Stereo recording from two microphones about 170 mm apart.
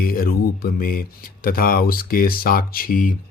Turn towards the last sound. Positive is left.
turn(degrees=55)  # may be behind; listen again after turning